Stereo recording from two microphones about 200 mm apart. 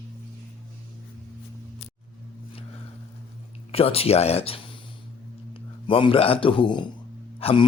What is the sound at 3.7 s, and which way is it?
A man's voice, 30° left (ahead or behind).